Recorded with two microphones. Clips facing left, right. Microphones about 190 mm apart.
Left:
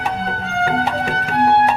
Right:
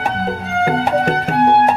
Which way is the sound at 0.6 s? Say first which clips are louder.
Right 4 dB; 50° right (ahead or behind).